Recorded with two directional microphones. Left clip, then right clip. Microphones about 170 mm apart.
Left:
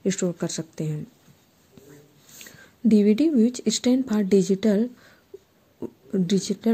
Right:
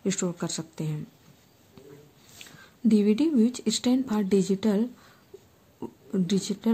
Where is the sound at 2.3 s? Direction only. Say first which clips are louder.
Left 2 dB; 15° left (ahead or behind).